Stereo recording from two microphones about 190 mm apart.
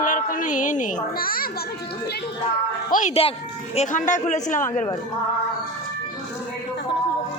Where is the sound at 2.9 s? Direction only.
45° left (ahead or behind).